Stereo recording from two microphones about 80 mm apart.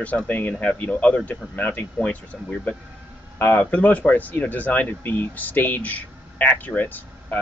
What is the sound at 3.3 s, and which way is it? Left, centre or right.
Speech, left.